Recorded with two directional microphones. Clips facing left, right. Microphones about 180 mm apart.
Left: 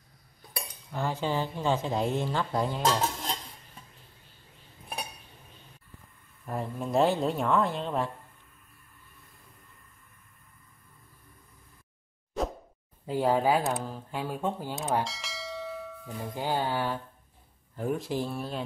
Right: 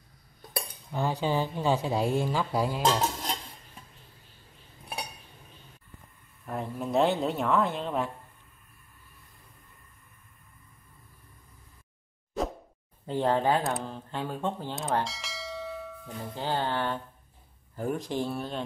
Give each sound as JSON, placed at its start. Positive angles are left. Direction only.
{"t": 0.9, "sound": "a woman's voice", "side_deg": -15}
{"t": 2.8, "sound": "cutlery", "side_deg": -20}
{"t": 6.4, "sound": "speech", "side_deg": 0}
{"t": 13.0, "sound": "speech", "side_deg": 5}
{"t": 16.3, "sound": "music", "side_deg": 10}
{"t": 17.7, "sound": "speech", "side_deg": 0}